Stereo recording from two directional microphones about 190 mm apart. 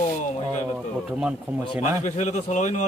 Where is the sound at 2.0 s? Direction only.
40° left (ahead or behind).